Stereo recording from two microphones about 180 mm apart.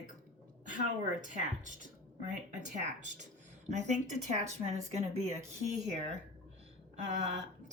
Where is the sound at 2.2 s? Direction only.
45° right (ahead or behind).